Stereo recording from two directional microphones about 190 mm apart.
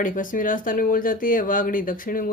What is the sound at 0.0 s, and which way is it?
Speech, 45° left (ahead or behind).